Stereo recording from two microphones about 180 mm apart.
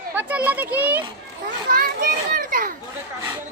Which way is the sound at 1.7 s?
50° right (ahead or behind).